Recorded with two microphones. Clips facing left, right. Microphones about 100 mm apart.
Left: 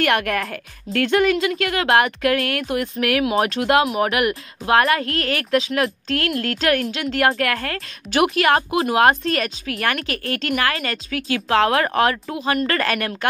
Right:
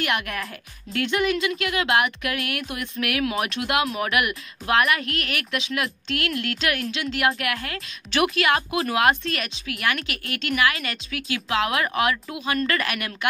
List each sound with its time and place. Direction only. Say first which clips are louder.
0.0 s a woman's voice: left 7 dB; 55° left (ahead or behind)
0.9 s speech: left 6 dB; 45° left (ahead or behind)